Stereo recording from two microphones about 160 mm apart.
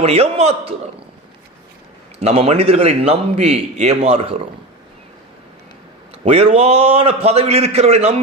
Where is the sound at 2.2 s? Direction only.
40° right (ahead or behind).